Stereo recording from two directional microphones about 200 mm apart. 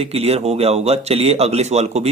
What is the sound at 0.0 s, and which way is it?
A man's voice, 30° right (ahead or behind).